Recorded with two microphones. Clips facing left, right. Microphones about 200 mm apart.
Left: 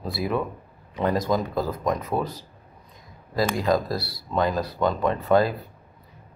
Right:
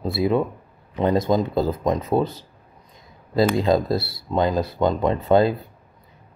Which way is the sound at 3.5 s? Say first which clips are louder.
Right 4 dB; 25° right (ahead or behind).